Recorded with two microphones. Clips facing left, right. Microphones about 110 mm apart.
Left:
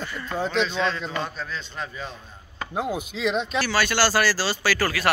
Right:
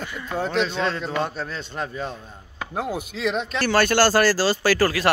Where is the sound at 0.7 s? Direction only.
45° right (ahead or behind).